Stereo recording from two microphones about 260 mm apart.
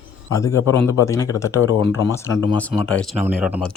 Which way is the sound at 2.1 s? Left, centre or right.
Centre.